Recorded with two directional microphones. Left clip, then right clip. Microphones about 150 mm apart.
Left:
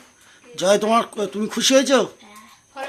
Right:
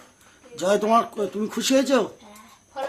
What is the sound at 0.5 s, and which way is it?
Speech, 25° left (ahead or behind).